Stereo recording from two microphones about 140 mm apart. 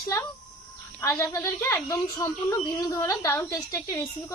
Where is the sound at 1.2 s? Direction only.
20° left (ahead or behind).